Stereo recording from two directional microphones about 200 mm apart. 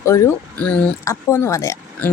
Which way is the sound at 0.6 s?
10° left (ahead or behind).